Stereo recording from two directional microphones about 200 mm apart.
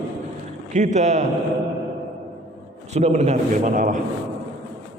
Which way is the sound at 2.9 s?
35° right (ahead or behind).